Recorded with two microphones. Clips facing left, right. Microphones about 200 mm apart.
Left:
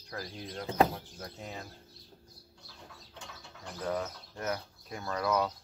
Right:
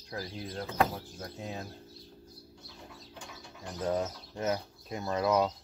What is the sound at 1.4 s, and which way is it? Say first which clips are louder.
Speech: right 4 dB; 20° right (ahead or behind).